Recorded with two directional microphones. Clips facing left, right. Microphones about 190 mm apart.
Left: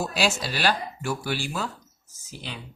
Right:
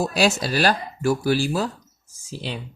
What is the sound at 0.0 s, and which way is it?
Speech, 40° right (ahead or behind).